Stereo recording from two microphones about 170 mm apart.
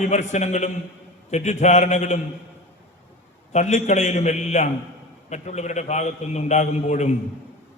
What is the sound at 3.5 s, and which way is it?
A man's voice, 40° left (ahead or behind).